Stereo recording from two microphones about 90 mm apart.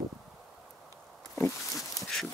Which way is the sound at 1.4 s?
40° left (ahead or behind).